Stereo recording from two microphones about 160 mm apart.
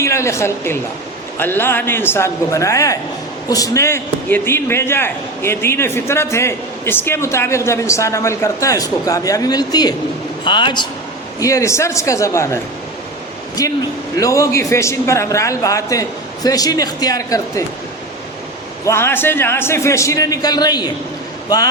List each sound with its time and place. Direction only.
0.0 s a woman's voice: 20° left (ahead or behind)
13.6 s a man's voice: 20° left (ahead or behind)
18.9 s a man's voice: 15° left (ahead or behind)